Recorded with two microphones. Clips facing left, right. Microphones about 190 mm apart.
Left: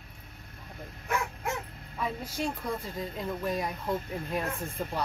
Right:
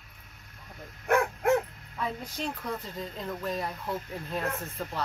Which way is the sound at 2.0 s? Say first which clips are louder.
Left 1 dB; 10° left (ahead or behind).